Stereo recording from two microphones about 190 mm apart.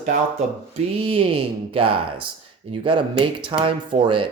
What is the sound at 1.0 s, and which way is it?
Speech, 30° right (ahead or behind).